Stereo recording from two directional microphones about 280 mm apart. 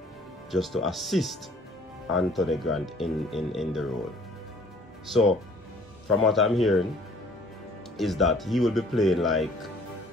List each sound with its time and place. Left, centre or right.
0.5 s speech: centre
5.0 s speech: centre
8.0 s speech: centre